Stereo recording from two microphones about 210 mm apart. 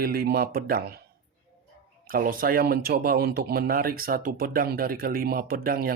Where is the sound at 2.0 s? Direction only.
45° right (ahead or behind).